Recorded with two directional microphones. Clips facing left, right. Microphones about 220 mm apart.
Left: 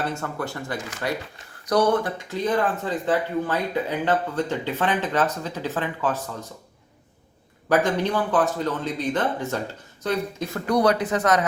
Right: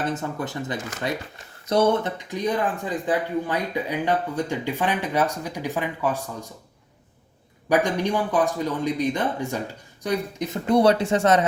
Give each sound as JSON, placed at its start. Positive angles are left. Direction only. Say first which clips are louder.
{"t": 0.0, "sound": "speech", "louder": "right 1 dB", "side_deg": -20}
{"t": 7.7, "sound": "speech", "louder": "even", "side_deg": -15}